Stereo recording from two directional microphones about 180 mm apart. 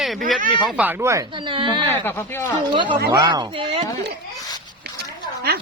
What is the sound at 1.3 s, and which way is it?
Speech, 25° right (ahead or behind).